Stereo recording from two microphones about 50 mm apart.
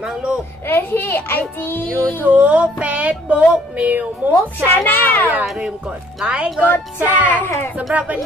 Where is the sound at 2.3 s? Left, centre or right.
Right.